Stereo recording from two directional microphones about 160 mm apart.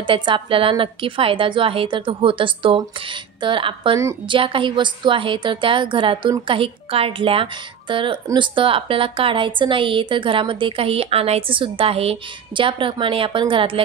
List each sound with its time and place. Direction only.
0.0 s speech: 30° right (ahead or behind)